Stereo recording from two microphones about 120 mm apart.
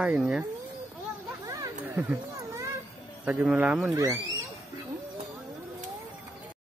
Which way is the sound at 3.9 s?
25° right (ahead or behind).